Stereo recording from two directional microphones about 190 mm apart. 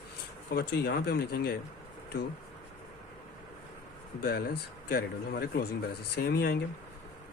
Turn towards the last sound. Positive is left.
turn(degrees=55)  # may be behind; listen again after turning